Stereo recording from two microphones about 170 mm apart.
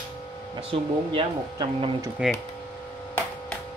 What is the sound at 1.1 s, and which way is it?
Speech, 30° right (ahead or behind).